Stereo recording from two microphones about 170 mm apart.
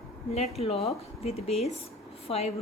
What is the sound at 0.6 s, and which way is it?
Speech, 35° left (ahead or behind).